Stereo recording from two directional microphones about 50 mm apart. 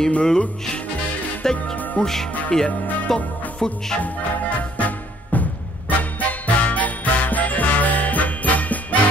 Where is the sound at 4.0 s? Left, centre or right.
Left.